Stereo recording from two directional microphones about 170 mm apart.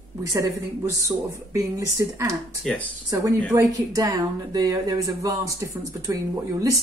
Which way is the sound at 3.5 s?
20° right (ahead or behind).